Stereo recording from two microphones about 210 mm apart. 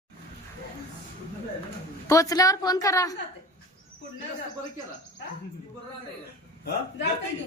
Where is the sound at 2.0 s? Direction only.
15° left (ahead or behind).